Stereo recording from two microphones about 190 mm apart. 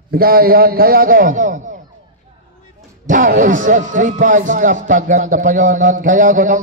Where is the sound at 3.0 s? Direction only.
45° right (ahead or behind).